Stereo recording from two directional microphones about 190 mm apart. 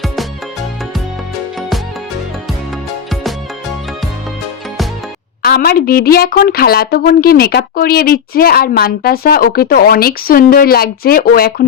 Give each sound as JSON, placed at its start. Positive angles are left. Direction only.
{"t": 5.4, "sound": "a woman's voice", "side_deg": 55}